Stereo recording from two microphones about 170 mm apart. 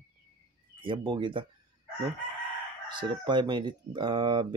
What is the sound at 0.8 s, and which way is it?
Speech, 30° right (ahead or behind).